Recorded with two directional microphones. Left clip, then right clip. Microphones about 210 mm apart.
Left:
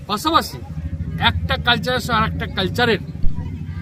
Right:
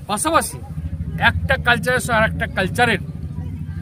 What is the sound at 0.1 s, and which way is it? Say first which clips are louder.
Speech: even; centre (ahead or behind).